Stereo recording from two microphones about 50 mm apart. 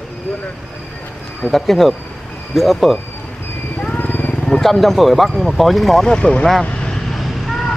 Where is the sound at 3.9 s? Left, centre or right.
Left.